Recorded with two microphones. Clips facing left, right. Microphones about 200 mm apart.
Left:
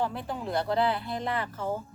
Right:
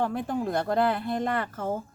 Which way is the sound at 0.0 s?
50° right (ahead or behind).